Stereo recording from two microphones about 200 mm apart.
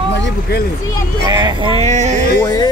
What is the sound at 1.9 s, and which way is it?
Music, 35° right (ahead or behind).